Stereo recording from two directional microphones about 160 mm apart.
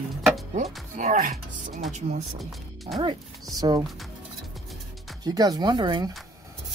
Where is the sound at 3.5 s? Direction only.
25° right (ahead or behind).